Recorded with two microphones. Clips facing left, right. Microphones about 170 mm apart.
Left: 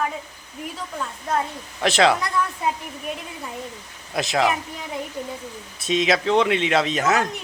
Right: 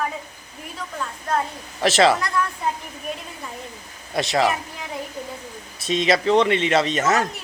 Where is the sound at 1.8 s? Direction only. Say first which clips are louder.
Right 1 dB; centre (ahead or behind).